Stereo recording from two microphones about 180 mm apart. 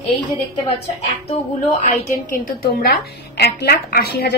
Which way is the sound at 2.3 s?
55° left (ahead or behind).